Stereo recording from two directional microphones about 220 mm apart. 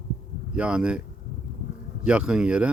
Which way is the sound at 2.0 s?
5° right (ahead or behind).